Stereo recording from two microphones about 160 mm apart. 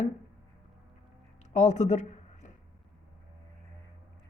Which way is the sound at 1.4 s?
50° left (ahead or behind).